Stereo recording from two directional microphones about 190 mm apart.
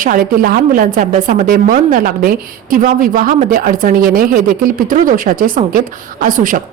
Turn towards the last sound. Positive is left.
turn(degrees=-45)  # may be behind; listen again after turning